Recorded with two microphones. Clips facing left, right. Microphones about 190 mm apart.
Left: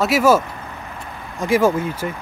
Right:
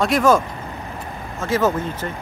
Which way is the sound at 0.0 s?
5° left (ahead or behind).